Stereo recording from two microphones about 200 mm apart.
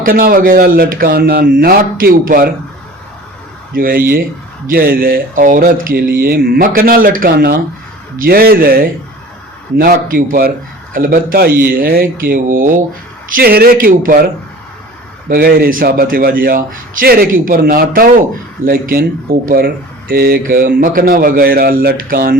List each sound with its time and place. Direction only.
0.0 s a man's voice: 45° right (ahead or behind)
3.8 s a man's voice: 45° right (ahead or behind)
15.3 s a man's voice: 50° right (ahead or behind)